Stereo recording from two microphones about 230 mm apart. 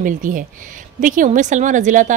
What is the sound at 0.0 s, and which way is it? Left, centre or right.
A woman's voice, right.